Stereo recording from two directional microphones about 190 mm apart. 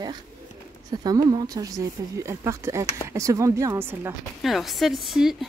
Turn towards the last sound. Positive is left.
turn(degrees=0)  # may be behind; listen again after turning